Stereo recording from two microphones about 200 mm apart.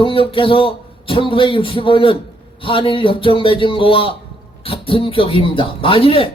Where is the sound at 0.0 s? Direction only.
25° left (ahead or behind).